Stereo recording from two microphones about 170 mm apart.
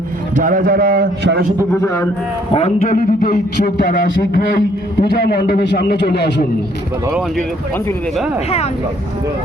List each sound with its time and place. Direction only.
0.3 s a man's voice: 55° right (ahead or behind); by 1.5 s 80° right
1.8 s a man's voice: 15° left (ahead or behind)
2.5 s a man's voice: 35° left (ahead or behind)
2.9 s a man's voice: 60° left (ahead or behind)
4.9 s a man's voice: 70° left (ahead or behind)
7.1 s speech: 5° right (ahead or behind)